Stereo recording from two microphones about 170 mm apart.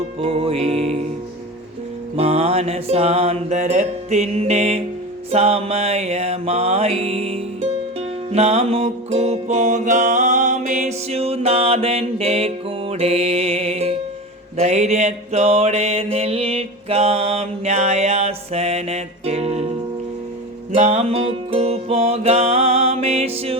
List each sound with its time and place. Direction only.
0.2 s music: 35° right (ahead or behind)
2.1 s music: 35° right (ahead or behind)
20.7 s music: 40° right (ahead or behind)